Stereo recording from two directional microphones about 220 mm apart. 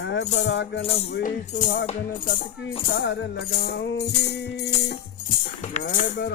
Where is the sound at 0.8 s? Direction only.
25° left (ahead or behind).